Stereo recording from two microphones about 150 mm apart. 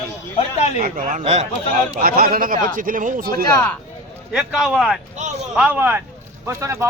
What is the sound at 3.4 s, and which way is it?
Speech, 20° left (ahead or behind).